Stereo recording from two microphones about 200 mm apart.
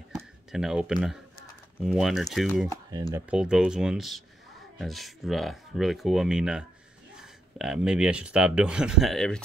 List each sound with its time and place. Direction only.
0.2 s speech: centre (ahead or behind)
2.7 s speech: 20° right (ahead or behind)
3.2 s speech: 5° right (ahead or behind)